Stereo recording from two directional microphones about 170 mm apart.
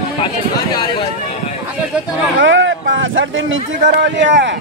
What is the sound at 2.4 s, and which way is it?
Speech, 90° right.